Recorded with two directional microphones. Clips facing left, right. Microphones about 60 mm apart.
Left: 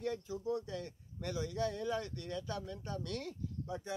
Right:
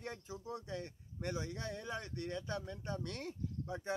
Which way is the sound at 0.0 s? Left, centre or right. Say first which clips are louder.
Left 8 dB; right.